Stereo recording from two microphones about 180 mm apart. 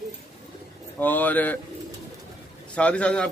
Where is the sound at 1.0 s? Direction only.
10° left (ahead or behind).